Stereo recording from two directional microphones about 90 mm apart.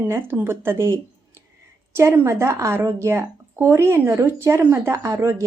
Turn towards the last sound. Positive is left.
turn(degrees=-30)  # may be behind; listen again after turning